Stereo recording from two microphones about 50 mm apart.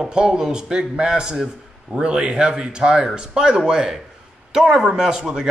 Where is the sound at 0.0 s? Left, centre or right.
Centre.